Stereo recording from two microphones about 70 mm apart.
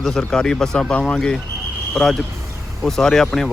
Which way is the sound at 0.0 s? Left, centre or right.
Centre.